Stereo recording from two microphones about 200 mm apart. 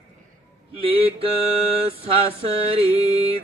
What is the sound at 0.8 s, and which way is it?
Mantra, 25° right (ahead or behind).